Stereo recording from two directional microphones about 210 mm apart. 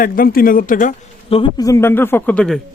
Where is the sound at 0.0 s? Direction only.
45° left (ahead or behind).